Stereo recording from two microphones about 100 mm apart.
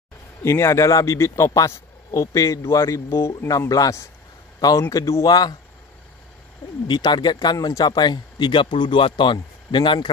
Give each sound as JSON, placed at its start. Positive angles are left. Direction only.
{"t": 0.4, "sound": "speech", "side_deg": 30}
{"t": 6.9, "sound": "speech", "side_deg": 50}